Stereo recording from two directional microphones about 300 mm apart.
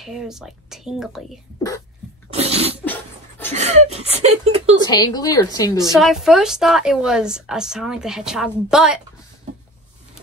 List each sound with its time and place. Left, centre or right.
0.0 s a woman's voice: centre
2.3 s sneeze: centre
2.8 s dog: centre
3.5 s speech: right
4.8 s a woman's voice: centre
5.9 s a woman's voice: centre